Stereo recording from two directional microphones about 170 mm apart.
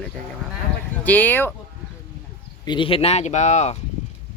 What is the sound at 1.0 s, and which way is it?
Speech, 10° left (ahead or behind).